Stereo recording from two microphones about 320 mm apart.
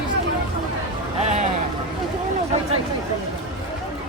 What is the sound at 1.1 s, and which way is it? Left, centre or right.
Vehicle, right.